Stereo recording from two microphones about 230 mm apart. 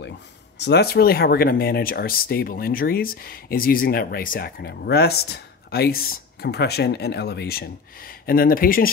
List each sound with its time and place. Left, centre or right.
0.6 s speech: left